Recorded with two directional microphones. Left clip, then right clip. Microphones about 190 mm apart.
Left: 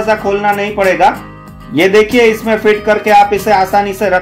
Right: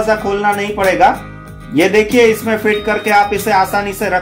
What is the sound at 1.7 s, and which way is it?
Speech, 30° left (ahead or behind).